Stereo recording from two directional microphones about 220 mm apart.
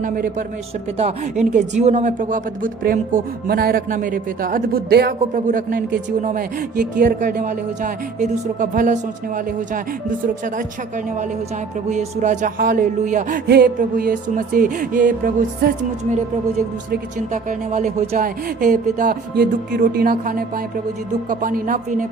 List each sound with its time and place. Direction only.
0.0 s speech: 35° right (ahead or behind)